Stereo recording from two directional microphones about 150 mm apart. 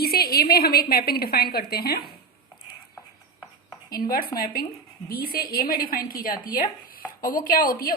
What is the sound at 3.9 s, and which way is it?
A woman's voice, 80° left.